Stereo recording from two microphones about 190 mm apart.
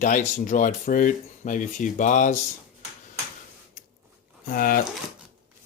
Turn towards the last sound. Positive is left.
turn(degrees=50)  # may be behind; listen again after turning